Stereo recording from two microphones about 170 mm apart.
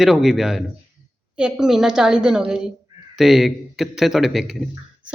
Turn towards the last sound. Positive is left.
turn(degrees=0)  # may be behind; listen again after turning